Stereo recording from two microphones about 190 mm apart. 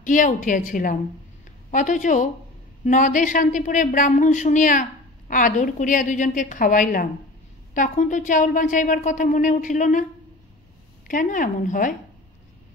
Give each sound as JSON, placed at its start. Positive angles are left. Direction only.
{"t": 0.0, "sound": "a woman's voice", "side_deg": 45}
{"t": 11.1, "sound": "a woman's voice", "side_deg": 45}